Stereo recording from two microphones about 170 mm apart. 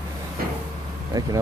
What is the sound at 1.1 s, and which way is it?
Speech, 20° right (ahead or behind).